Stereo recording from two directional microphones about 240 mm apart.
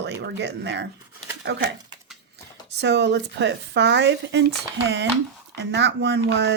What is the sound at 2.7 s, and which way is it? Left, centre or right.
Speech, right.